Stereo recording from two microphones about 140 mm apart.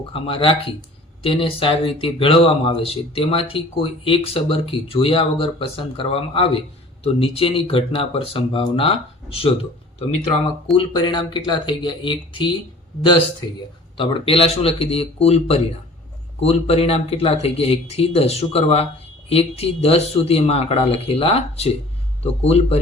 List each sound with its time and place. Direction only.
0.1 s speech: 40° left (ahead or behind)
10.8 s speech: 30° left (ahead or behind)
13.9 s speech: 40° left (ahead or behind)